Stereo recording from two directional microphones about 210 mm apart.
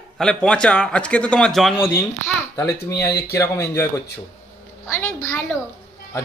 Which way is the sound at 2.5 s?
15° left (ahead or behind).